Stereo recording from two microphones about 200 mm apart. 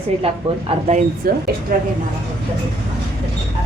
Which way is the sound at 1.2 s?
50° right (ahead or behind).